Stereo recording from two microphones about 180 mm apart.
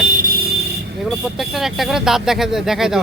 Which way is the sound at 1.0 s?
Centre (ahead or behind).